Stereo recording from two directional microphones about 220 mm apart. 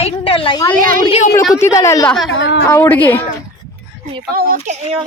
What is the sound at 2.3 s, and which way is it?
Speech, 50° left (ahead or behind).